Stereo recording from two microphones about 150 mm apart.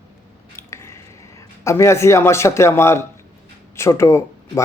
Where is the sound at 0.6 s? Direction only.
20° left (ahead or behind).